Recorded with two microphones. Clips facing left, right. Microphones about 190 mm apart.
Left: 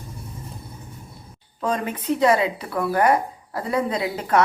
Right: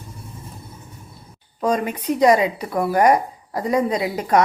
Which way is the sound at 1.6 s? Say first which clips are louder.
Right 4 dB; 10° right (ahead or behind).